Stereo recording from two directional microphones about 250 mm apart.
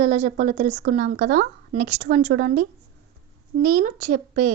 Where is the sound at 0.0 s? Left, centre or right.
Right.